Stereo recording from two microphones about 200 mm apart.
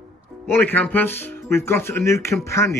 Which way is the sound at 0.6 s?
10° left (ahead or behind).